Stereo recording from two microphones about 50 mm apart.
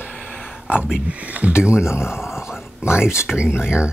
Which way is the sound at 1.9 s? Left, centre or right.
Left.